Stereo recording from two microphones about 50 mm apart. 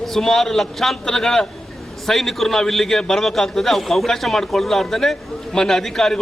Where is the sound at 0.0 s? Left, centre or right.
Centre.